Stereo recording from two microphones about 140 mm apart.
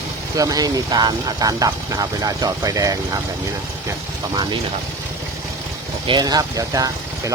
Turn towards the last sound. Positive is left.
turn(degrees=-25)  # may be behind; listen again after turning